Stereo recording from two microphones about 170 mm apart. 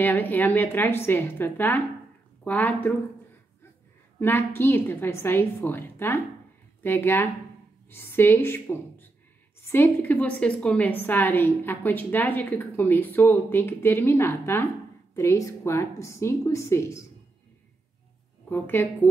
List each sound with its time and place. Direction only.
0.0 s a woman's voice: 10° left (ahead or behind)
4.2 s a woman's voice: 15° left (ahead or behind)
18.5 s a woman's voice: 10° left (ahead or behind)